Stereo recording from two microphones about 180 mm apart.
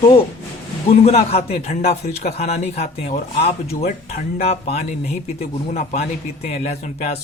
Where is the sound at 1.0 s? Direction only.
35° left (ahead or behind).